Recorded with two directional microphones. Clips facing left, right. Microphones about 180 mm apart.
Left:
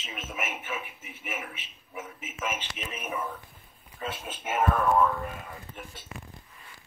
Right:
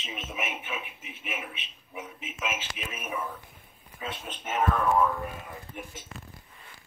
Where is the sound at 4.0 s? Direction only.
5° left (ahead or behind).